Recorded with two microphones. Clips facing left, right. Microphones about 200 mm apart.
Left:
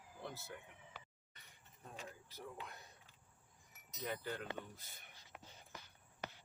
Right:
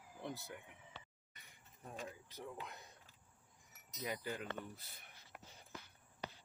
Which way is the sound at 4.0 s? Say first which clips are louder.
Even; 10° right (ahead or behind).